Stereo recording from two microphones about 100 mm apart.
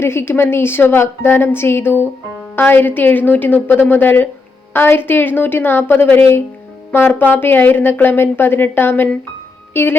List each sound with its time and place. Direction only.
0.0 s speech: 25° left (ahead or behind)